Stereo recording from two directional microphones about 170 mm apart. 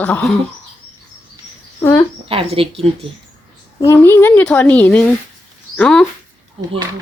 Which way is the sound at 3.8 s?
15° left (ahead or behind).